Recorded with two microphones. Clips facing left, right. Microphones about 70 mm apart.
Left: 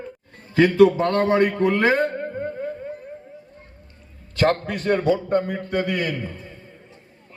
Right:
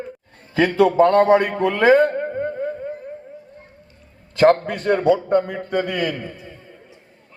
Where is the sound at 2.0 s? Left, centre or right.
Right.